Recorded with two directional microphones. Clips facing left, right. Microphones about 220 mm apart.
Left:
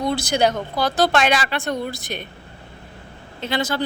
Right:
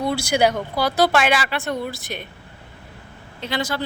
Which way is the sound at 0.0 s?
10° right (ahead or behind).